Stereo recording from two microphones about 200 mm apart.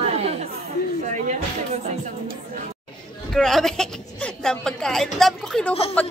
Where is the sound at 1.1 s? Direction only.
40° right (ahead or behind).